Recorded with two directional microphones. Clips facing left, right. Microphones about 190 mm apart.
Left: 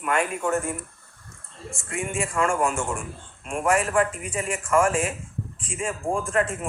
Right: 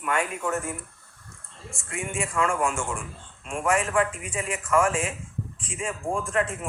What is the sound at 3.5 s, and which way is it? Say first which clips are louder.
A man's voice: left 2 dB; 50° left (ahead or behind).